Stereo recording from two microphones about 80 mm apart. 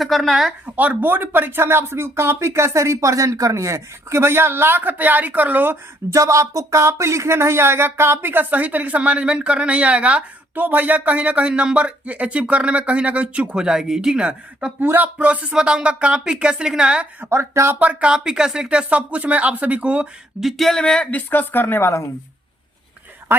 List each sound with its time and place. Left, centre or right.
0.0 s speech: centre
0.8 s speech: right
6.1 s speech: right; by 14.7 s centre
14.8 s speech: right
17.2 s speech: right
17.7 s speech: centre
20.4 s speech: centre; by 22.1 s left